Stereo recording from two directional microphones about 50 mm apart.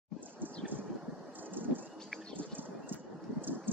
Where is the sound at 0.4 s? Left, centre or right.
Right.